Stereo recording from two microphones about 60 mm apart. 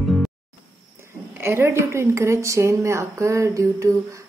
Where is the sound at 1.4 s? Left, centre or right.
Right.